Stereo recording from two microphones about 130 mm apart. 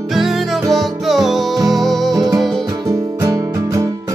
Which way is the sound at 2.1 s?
30° right (ahead or behind).